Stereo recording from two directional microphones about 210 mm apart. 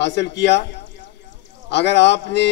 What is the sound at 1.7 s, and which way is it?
Speech, 55° left (ahead or behind).